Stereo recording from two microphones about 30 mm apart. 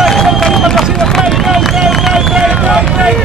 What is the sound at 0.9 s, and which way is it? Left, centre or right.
Run, centre.